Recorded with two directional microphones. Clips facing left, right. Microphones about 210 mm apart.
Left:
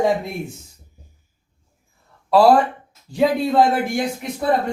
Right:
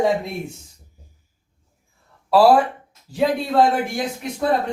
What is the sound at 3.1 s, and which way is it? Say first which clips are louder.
Speech: left 1 dB; 5° right (ahead or behind).